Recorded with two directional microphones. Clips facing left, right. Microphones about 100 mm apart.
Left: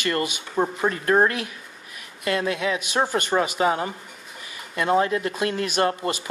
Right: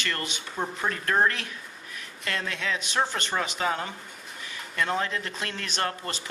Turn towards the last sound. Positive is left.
turn(degrees=10)  # may be behind; listen again after turning